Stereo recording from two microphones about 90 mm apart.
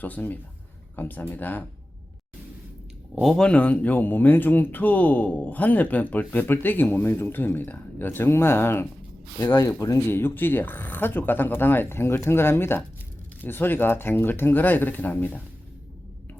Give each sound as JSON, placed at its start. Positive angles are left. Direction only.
{"t": 0.0, "sound": "speech", "side_deg": 20}
{"t": 3.2, "sound": "speech", "side_deg": 0}
{"t": 3.4, "sound": "speech", "side_deg": 15}
{"t": 9.4, "sound": "speech", "side_deg": 40}
{"t": 10.1, "sound": "speech", "side_deg": 25}